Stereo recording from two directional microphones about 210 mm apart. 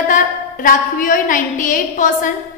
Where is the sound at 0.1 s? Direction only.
40° left (ahead or behind).